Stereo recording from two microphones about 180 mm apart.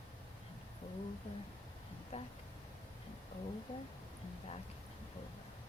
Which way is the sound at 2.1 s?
40° left (ahead or behind).